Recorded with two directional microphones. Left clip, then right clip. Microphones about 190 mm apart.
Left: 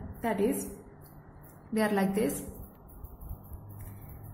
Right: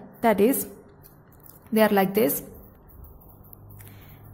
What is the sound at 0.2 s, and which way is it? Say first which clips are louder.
Speech: right 10 dB; 45° right (ahead or behind).